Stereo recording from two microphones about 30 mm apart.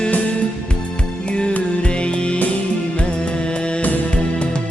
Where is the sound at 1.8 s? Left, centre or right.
Left.